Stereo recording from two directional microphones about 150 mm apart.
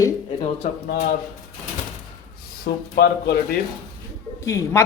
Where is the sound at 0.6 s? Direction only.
50° left (ahead or behind).